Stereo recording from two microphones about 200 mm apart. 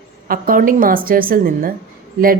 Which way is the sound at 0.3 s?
45° right (ahead or behind).